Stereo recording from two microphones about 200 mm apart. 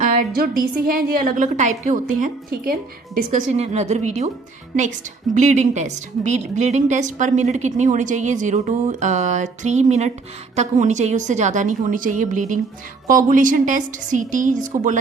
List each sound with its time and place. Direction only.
0.0 s a woman's voice: 45° right (ahead or behind)